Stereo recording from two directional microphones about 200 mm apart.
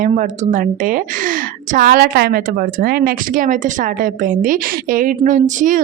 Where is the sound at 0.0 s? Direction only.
40° right (ahead or behind).